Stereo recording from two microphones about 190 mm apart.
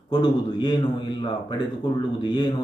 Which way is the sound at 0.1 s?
25° left (ahead or behind).